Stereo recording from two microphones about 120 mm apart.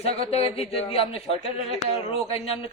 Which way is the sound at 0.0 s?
60° left (ahead or behind).